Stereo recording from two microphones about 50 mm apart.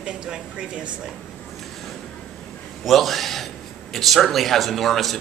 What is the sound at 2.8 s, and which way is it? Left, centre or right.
A man's voice, centre.